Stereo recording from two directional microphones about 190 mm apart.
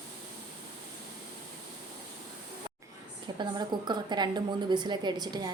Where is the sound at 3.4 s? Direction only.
20° right (ahead or behind).